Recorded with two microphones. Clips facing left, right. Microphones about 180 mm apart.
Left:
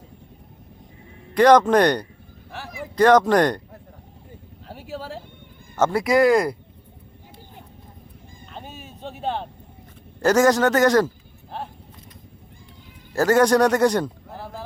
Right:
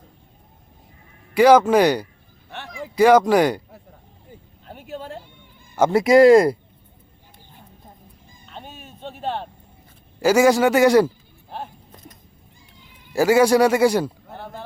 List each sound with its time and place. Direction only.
1.3 s a man's voice: 5° right (ahead or behind)
2.5 s a sound: 5° left (ahead or behind)
2.8 s speech: 10° right (ahead or behind)
5.9 s speech: 25° right (ahead or behind)
8.5 s vehicle: centre (ahead or behind)
10.2 s a man's voice: 10° right (ahead or behind)
11.5 s a sound: centre (ahead or behind)
13.1 s a man's voice: 10° right (ahead or behind)